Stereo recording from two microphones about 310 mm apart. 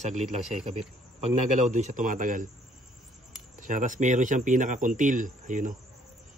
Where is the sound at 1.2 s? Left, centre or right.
Right.